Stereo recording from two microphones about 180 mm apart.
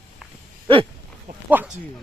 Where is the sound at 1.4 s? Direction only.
10° right (ahead or behind).